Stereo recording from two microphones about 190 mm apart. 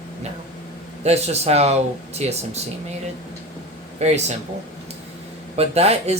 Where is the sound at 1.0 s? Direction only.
35° right (ahead or behind).